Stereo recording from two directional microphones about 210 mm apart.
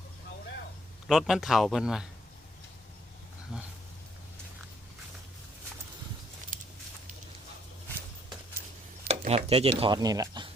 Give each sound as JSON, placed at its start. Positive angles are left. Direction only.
{"t": 1.0, "sound": "a man's voice", "side_deg": 0}
{"t": 3.5, "sound": "a man's voice", "side_deg": 0}
{"t": 9.0, "sound": "speech", "side_deg": -30}